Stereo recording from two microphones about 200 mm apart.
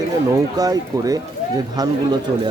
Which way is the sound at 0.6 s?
20° right (ahead or behind).